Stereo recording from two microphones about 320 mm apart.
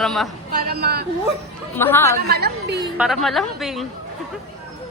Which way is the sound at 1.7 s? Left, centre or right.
Centre.